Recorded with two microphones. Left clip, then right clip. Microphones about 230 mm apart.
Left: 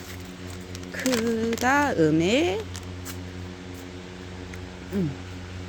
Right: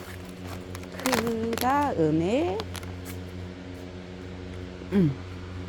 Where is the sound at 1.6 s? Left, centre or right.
Centre.